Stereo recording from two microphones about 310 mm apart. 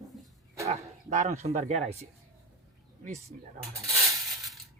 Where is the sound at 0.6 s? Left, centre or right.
Right.